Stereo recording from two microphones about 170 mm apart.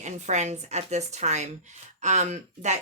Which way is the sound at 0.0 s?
45° right (ahead or behind).